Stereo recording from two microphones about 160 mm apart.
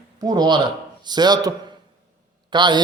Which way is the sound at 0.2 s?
25° right (ahead or behind).